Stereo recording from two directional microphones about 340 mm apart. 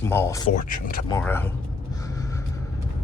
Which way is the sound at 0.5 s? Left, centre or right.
Left.